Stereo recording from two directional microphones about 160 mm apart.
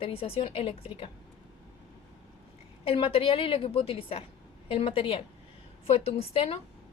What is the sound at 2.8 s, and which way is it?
A woman's voice, 35° left (ahead or behind).